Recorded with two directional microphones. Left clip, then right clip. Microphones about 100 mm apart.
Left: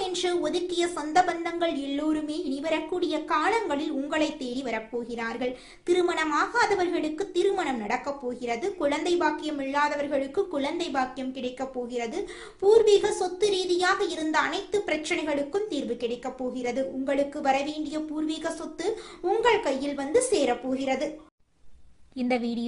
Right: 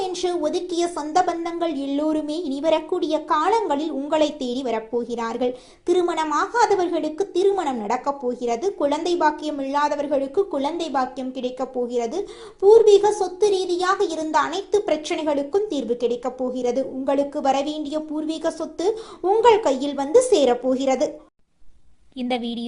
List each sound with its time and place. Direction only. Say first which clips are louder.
0.1 s a woman's voice: right 4 dB; 20° right (ahead or behind); by 5.5 s 40° right (ahead or behind)
5.8 s a woman's voice: right 4 dB; 25° right (ahead or behind)
12.6 s a woman's voice: right 6 dB; 20° right (ahead or behind); by 17.7 s 40° right (ahead or behind)
19.4 s a woman's voice: right 8 dB; 45° right (ahead or behind)
22.2 s a woman's voice: right 2 dB; 5° right (ahead or behind)